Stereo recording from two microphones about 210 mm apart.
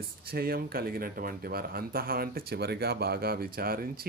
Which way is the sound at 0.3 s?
45° right (ahead or behind).